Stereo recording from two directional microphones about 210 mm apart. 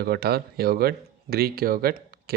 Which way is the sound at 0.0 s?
50° right (ahead or behind).